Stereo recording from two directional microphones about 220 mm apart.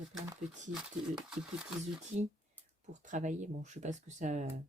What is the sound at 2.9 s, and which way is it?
Speech, 35° right (ahead or behind).